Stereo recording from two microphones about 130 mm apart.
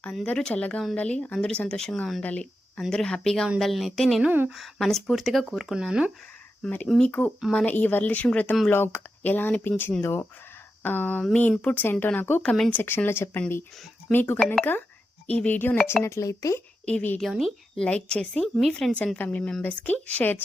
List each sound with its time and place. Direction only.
0.0 s a woman's voice: 10° left (ahead or behind)
4.2 s a woman's voice: 10° right (ahead or behind)
4.5 s speech: centre (ahead or behind)
6.6 s a woman's voice: 10° left (ahead or behind)
12.4 s speech: 5° left (ahead or behind)
12.7 s a woman's voice: 15° left (ahead or behind)
16.8 s a woman's voice: 10° left (ahead or behind)